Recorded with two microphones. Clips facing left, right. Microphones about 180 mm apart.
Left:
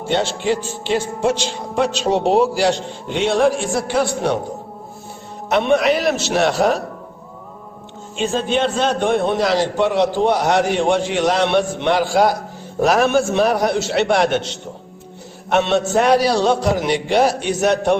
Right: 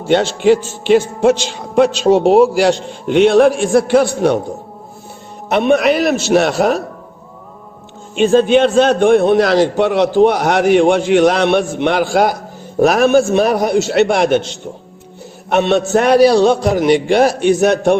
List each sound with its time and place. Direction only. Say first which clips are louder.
0.1 s a man's voice: right 8 dB; 60° right (ahead or behind)
5.5 s a man's voice: right 3 dB; 55° right (ahead or behind)
8.1 s a man's voice: right 9 dB; 60° right (ahead or behind)
15.4 s a man's voice: right 3 dB; 60° right (ahead or behind)